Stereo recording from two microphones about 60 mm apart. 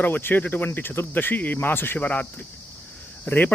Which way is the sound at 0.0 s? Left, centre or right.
Left.